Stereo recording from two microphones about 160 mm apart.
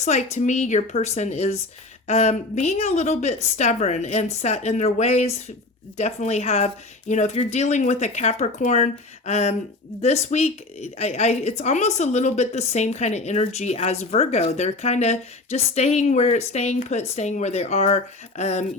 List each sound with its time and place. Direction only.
0.0 s a woman's voice: 45° left (ahead or behind)